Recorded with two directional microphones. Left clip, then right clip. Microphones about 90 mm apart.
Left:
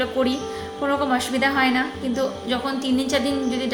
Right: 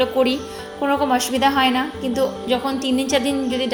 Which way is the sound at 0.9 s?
45° right (ahead or behind).